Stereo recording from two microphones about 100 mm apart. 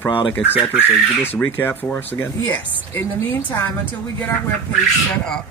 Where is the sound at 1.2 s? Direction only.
20° left (ahead or behind).